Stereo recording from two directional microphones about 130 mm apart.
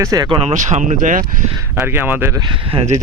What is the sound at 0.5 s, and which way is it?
Speech, 70° right (ahead or behind).